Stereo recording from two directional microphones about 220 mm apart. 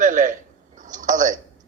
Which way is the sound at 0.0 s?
35° right (ahead or behind).